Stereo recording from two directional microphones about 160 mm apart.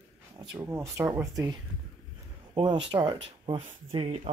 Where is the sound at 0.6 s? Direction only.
15° right (ahead or behind).